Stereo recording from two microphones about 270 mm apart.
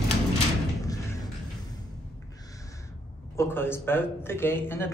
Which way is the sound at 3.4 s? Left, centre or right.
Centre.